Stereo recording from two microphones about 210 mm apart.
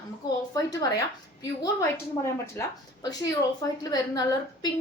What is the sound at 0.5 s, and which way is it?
A woman's voice, 15° left (ahead or behind).